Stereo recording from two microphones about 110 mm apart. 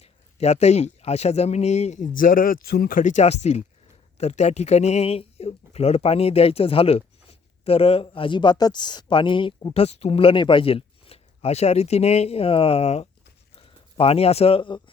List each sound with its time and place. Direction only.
0.0 s speech: 75° left (ahead or behind)
3.1 s speech: 85° left; by 9.7 s 45° left (ahead or behind)
9.7 s speech: 70° left (ahead or behind)
13.6 s speech: 60° left (ahead or behind)